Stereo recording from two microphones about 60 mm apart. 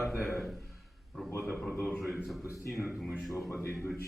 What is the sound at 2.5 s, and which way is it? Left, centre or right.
Speech, left.